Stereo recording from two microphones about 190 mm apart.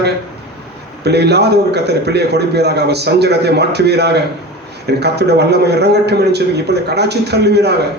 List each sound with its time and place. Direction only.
1.0 s a man's voice: 60° right (ahead or behind)